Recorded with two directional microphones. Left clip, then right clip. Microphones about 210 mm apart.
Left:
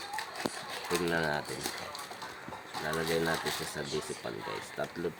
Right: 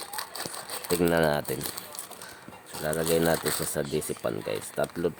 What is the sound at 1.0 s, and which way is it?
Speech, 55° right (ahead or behind).